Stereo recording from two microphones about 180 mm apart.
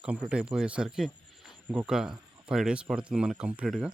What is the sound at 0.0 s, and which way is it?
Speech, 5° right (ahead or behind).